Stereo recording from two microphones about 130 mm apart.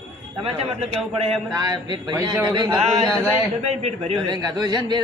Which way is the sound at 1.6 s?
30° right (ahead or behind).